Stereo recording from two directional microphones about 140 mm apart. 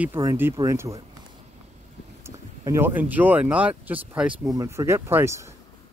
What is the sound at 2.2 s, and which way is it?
Speech, 15° right (ahead or behind).